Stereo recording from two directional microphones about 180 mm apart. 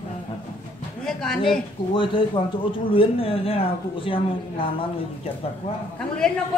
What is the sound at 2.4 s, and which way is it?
A man's voice, 25° left (ahead or behind).